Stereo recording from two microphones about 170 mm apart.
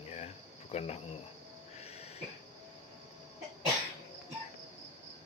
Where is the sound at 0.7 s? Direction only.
40° left (ahead or behind).